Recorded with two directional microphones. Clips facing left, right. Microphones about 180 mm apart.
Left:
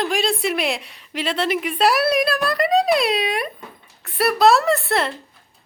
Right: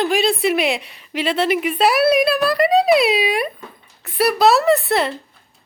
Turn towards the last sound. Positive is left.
turn(degrees=0)  # may be behind; listen again after turning